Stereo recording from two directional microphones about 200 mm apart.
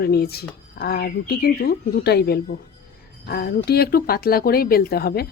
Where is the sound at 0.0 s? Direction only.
50° left (ahead or behind).